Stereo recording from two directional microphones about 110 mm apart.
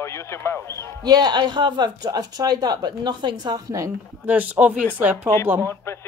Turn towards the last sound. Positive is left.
turn(degrees=20)  # may be behind; listen again after turning